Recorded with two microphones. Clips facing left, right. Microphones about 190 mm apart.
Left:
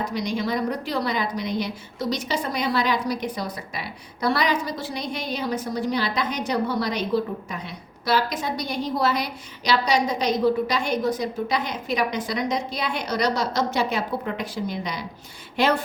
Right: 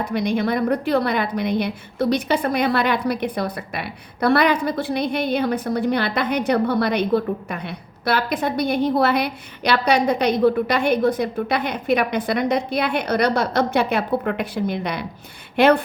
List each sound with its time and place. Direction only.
0.0 s a woman's voice: 55° right (ahead or behind)